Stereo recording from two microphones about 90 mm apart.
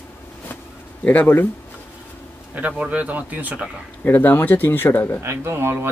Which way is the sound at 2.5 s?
15° right (ahead or behind).